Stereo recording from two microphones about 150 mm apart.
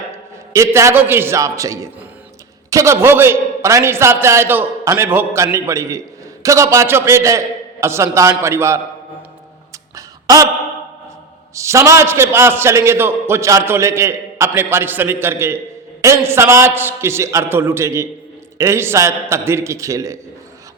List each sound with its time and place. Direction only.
0.5 s a man's voice: 20° right (ahead or behind)
9.9 s a sound: 20° right (ahead or behind)
11.5 s a man's voice: 20° right (ahead or behind)